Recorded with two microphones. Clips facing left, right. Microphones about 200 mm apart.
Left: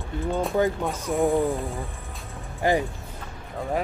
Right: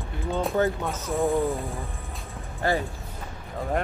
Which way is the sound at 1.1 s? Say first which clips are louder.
Left 2 dB; centre (ahead or behind).